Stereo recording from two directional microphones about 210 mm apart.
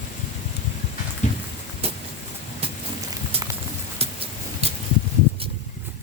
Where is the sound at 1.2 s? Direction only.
35° left (ahead or behind).